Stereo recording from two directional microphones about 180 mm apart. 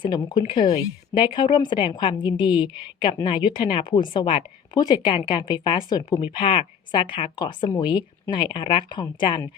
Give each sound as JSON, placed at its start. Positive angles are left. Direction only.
{"t": 0.0, "sound": "a woman's voice", "side_deg": 25}